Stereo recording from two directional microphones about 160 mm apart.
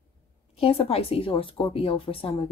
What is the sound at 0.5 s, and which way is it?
A woman's voice, 35° left (ahead or behind).